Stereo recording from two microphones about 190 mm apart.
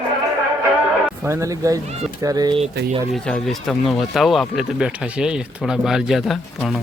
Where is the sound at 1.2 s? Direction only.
15° right (ahead or behind).